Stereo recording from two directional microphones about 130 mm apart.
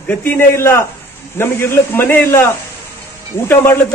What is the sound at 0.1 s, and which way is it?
A man's voice, 15° left (ahead or behind).